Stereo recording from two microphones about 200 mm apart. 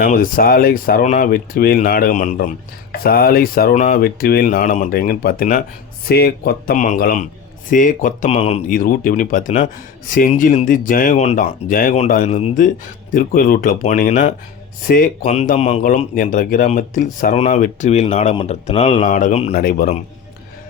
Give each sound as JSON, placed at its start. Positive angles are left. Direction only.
{"t": 0.0, "sound": "speech", "side_deg": 45}
{"t": 19.0, "sound": "speech", "side_deg": 40}
{"t": 19.5, "sound": "speech", "side_deg": 45}